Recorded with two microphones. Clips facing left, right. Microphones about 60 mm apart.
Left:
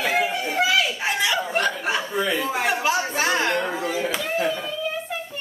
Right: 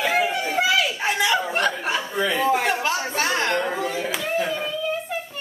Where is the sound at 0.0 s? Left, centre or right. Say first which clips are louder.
Right 1 dB; centre.